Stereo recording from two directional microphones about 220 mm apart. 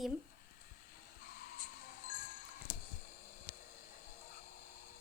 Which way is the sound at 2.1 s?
40° left (ahead or behind).